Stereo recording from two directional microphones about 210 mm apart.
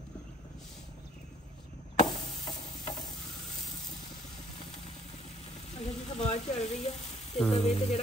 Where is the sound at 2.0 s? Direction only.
35° left (ahead or behind).